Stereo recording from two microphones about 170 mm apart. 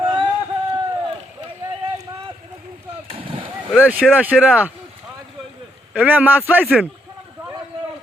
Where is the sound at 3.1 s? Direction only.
30° right (ahead or behind).